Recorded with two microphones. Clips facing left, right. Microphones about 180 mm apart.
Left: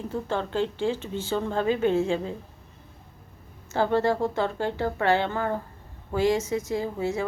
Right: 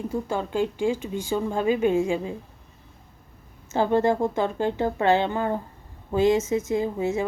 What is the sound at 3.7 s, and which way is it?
A woman's voice, 15° right (ahead or behind).